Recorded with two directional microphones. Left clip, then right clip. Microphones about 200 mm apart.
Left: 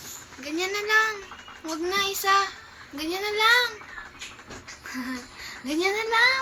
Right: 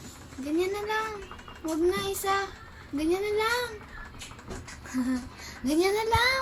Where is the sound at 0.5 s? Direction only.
40° right (ahead or behind).